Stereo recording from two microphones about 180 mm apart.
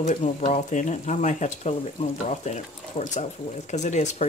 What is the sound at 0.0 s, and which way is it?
Speech, 45° left (ahead or behind).